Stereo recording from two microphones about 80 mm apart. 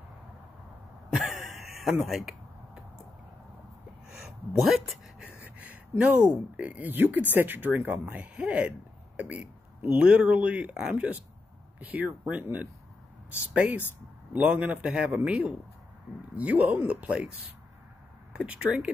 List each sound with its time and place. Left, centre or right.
1.1 s throat clearing: centre
2.0 s speech: centre
4.6 s speech: centre
5.4 s speech: centre
14.3 s speech: centre
16.3 s speech: centre
18.3 s speech: centre